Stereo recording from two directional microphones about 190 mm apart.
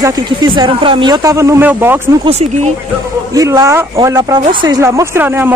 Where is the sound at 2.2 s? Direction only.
35° right (ahead or behind).